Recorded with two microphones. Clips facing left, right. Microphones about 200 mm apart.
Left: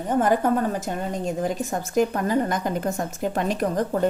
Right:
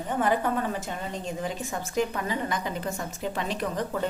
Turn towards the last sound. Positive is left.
turn(degrees=45)  # may be behind; listen again after turning